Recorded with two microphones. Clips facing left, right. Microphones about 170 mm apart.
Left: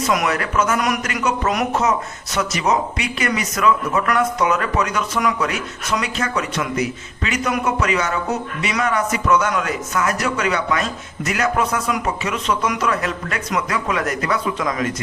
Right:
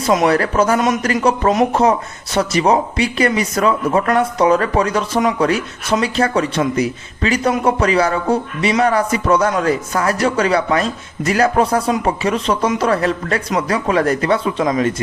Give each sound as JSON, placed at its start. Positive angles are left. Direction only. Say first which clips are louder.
{"t": 0.0, "sound": "a man's voice", "louder": "right 6 dB", "side_deg": -30}